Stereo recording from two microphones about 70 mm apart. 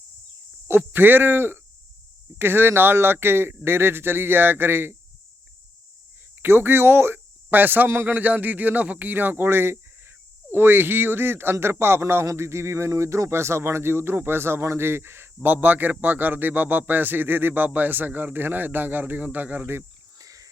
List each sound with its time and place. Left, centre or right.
0.7 s speech: right
6.4 s a man's voice: right
20.1 s wild animals: right